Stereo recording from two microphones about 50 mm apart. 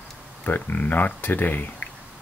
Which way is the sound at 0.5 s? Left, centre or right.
Left.